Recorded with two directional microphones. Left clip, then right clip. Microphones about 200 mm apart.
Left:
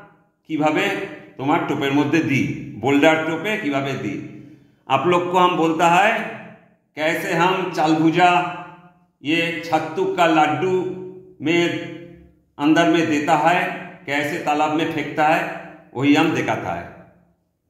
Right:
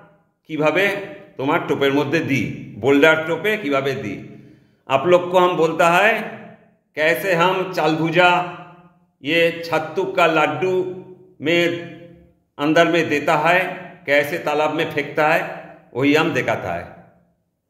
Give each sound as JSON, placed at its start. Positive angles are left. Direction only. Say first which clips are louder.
{"t": 0.5, "sound": "a man's voice", "louder": "right 2 dB", "side_deg": -45}